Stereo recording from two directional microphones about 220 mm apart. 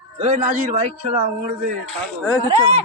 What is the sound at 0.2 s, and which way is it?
Speech, 30° right (ahead or behind).